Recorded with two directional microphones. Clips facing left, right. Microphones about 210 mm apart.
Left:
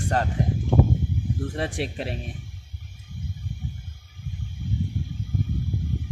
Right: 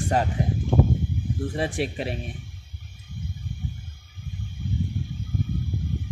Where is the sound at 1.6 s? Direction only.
5° right (ahead or behind).